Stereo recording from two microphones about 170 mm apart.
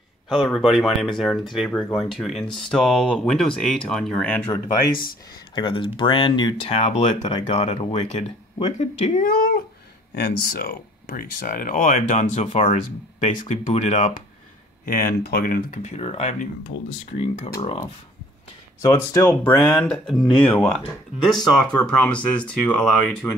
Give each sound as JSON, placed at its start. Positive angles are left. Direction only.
{"t": 0.3, "sound": "speech", "side_deg": 0}
{"t": 5.5, "sound": "speech", "side_deg": 30}
{"t": 8.7, "sound": "speech", "side_deg": 45}
{"t": 14.9, "sound": "speech", "side_deg": 55}
{"t": 16.0, "sound": "speech", "side_deg": 40}
{"t": 18.8, "sound": "speech", "side_deg": 20}